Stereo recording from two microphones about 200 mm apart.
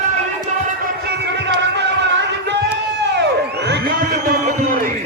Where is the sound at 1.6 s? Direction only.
60° right (ahead or behind).